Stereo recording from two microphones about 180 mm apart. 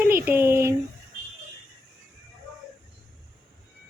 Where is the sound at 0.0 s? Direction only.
10° right (ahead or behind).